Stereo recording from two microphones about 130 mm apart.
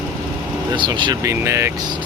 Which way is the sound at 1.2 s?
20° right (ahead or behind).